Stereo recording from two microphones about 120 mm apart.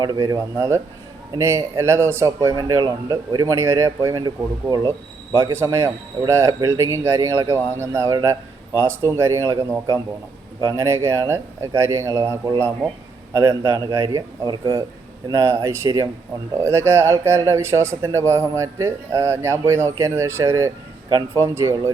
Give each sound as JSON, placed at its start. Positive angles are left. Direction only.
{"t": 0.0, "sound": "a man's voice", "side_deg": -30}
{"t": 15.3, "sound": "speech", "side_deg": -25}